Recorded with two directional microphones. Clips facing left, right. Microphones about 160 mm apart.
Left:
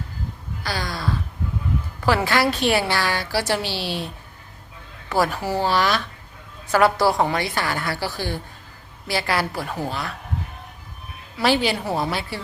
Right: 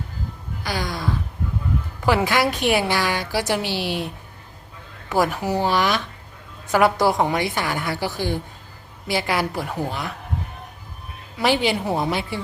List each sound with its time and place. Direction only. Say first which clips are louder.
0.6 s a sound: right 1 dB; 20° right (ahead or behind)
2.0 s a woman's voice: even; 15° right (ahead or behind)
11.3 s a woman's voice: even; 15° right (ahead or behind)